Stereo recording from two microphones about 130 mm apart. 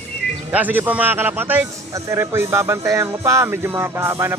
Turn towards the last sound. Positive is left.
turn(degrees=-20)  # may be behind; listen again after turning